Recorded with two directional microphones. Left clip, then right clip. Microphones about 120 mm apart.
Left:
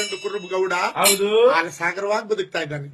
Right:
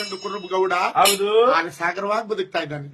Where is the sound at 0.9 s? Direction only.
45° right (ahead or behind).